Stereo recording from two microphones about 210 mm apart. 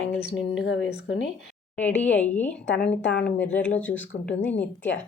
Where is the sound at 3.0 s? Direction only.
55° left (ahead or behind).